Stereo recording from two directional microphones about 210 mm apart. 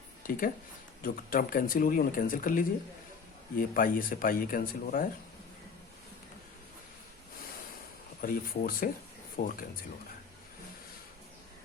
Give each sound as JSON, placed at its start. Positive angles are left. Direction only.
{"t": 0.2, "sound": "speech", "side_deg": 40}
{"t": 8.2, "sound": "speech", "side_deg": 40}